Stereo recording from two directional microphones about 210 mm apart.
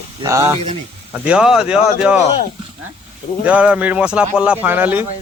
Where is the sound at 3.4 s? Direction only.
5° right (ahead or behind).